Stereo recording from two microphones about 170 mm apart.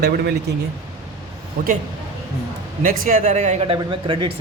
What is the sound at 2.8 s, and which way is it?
Speech, 55° right (ahead or behind).